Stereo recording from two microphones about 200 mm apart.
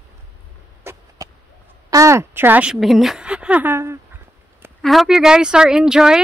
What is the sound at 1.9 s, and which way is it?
A woman's voice, 15° right (ahead or behind).